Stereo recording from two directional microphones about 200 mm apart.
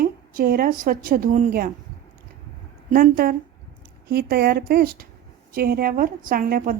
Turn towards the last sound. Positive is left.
turn(degrees=-45)  # may be behind; listen again after turning